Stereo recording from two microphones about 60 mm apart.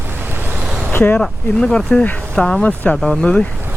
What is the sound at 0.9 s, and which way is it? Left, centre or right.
Speech, left.